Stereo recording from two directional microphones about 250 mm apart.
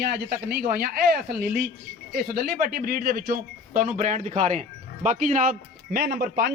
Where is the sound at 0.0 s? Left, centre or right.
Right.